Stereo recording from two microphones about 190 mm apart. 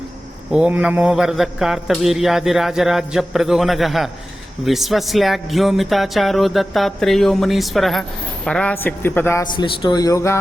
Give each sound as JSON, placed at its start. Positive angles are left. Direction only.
{"t": 0.5, "sound": "a man's voice", "side_deg": -5}